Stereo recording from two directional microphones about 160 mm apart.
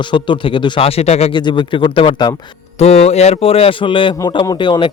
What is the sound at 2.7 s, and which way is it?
A man's voice, 45° left (ahead or behind).